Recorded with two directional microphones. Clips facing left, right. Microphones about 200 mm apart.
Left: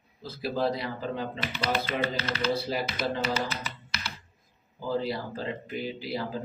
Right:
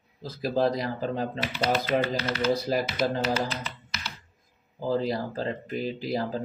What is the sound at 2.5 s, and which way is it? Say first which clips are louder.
Speech: right 3 dB; 45° right (ahead or behind).